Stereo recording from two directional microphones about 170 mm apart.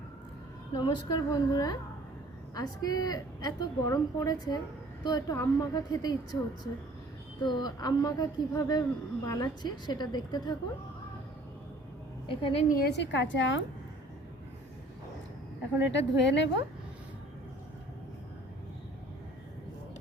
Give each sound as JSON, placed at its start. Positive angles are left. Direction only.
{"t": 0.8, "sound": "a woman's voice", "side_deg": 25}
{"t": 7.4, "sound": "a woman's voice", "side_deg": 25}
{"t": 12.3, "sound": "a woman's voice", "side_deg": 30}
{"t": 12.6, "sound": "a woman's voice", "side_deg": 65}
{"t": 15.9, "sound": "a woman's voice", "side_deg": 90}